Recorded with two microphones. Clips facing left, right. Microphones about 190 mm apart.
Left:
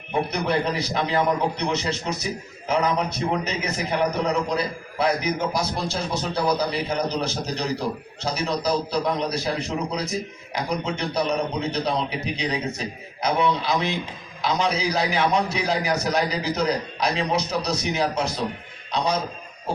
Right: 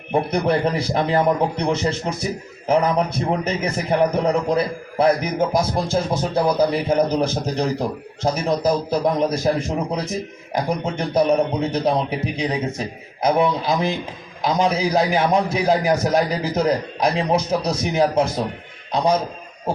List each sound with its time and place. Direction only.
0.1 s a man's voice: 55° right (ahead or behind)